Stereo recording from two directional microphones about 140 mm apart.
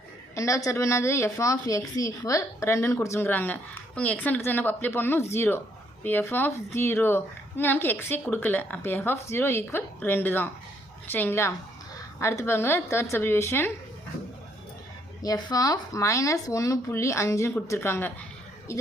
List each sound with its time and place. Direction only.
0.3 s a woman's voice: 25° left (ahead or behind)
15.2 s a woman's voice: 25° left (ahead or behind)